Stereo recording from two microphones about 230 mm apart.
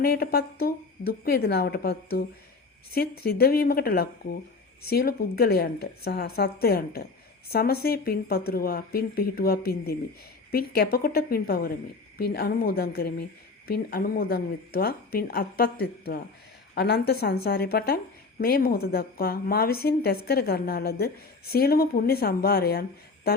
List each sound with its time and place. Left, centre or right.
0.0 s a woman's voice: left